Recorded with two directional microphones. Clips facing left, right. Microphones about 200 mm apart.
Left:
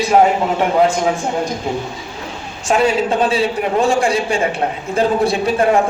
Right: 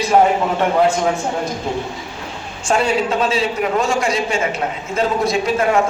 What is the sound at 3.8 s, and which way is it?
A man's voice, 30° left (ahead or behind).